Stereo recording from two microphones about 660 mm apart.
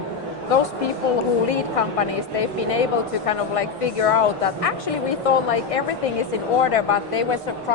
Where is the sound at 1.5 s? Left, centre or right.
Left.